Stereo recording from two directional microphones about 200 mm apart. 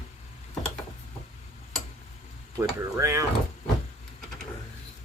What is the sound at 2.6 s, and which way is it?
Speech, 15° right (ahead or behind).